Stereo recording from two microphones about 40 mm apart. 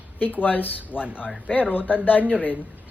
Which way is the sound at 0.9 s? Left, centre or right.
Right.